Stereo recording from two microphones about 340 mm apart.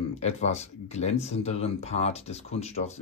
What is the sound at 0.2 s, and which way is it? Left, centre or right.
Speech, centre.